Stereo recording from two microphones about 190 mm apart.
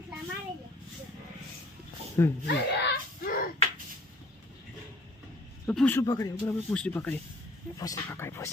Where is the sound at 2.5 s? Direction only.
60° left (ahead or behind).